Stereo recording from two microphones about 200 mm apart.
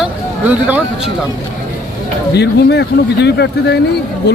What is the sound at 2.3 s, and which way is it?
A man's voice, 55° left (ahead or behind).